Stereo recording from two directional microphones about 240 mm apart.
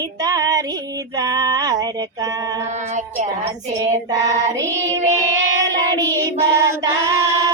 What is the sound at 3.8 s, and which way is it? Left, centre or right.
Child singing, centre.